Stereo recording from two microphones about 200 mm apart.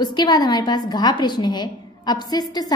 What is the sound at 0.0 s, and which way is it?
A woman's voice, 20° left (ahead or behind).